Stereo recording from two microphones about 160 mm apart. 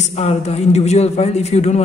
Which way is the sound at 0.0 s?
45° left (ahead or behind).